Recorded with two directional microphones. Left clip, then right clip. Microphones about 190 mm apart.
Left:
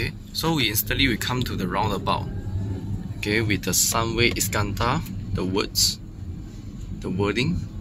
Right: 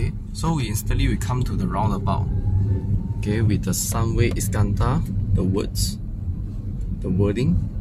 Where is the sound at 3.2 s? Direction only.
Centre (ahead or behind).